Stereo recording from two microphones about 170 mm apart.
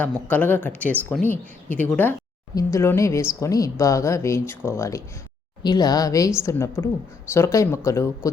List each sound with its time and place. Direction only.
0.0 s a woman's voice: 10° left (ahead or behind)